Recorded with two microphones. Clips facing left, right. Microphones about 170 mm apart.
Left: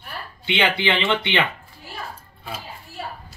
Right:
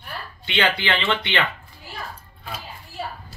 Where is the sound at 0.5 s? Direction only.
15° left (ahead or behind).